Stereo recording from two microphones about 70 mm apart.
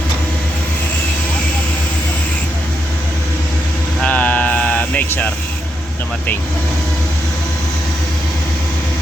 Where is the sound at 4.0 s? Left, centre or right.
Left.